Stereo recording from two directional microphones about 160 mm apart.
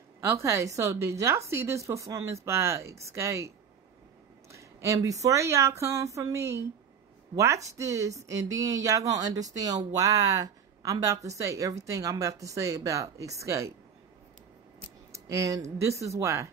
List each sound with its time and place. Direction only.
0.2 s speech: 15° right (ahead or behind)
15.1 s speech: 20° right (ahead or behind)